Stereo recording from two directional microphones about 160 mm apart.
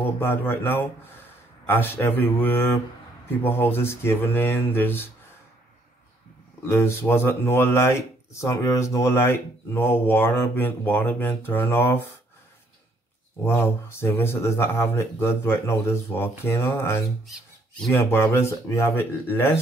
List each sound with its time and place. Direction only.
0.2 s speech: 10° left (ahead or behind)
6.6 s speech: 15° left (ahead or behind)
13.4 s speech: 15° left (ahead or behind)